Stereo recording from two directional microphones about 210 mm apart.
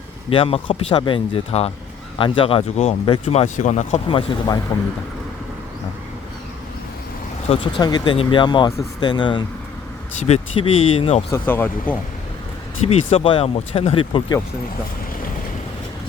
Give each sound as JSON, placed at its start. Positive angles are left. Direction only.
{"t": 0.3, "sound": "speech", "side_deg": 25}
{"t": 4.7, "sound": "speech", "side_deg": 20}
{"t": 7.4, "sound": "speech", "side_deg": 25}
{"t": 11.3, "sound": "speech", "side_deg": 10}
{"t": 12.8, "sound": "speech", "side_deg": 30}